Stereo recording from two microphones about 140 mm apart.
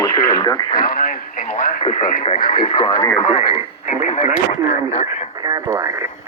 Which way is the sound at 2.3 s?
90° left.